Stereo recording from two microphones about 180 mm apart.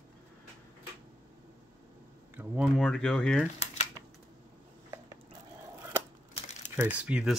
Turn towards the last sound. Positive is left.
turn(degrees=-5)  # may be behind; listen again after turning